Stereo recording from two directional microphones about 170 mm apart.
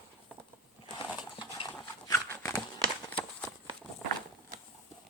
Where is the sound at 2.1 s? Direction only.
20° left (ahead or behind).